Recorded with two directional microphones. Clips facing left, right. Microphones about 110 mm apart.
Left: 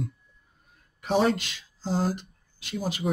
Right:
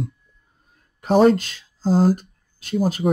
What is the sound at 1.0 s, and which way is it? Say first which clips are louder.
Speech: right 9 dB; 45° right (ahead or behind).